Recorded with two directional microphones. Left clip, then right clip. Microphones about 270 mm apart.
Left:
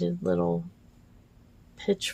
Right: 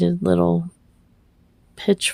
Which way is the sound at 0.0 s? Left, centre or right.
Right.